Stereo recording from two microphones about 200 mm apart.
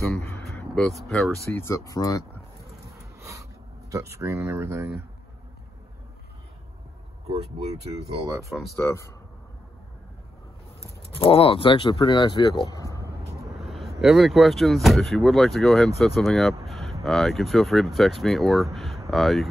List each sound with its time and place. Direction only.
0.0 s a sound: centre (ahead or behind)
1.0 s speech: centre (ahead or behind)
1.6 s speech: 15° left (ahead or behind)
2.9 s a sound: 15° right (ahead or behind)
3.9 s speech: 15° right (ahead or behind)
7.5 s speech: 30° right (ahead or behind)
8.7 s speech: 15° left (ahead or behind)
10.8 s speech: 30° left (ahead or behind)
13.6 s speech: centre (ahead or behind)
16.6 s a sound: centre (ahead or behind)
17.0 s speech: centre (ahead or behind)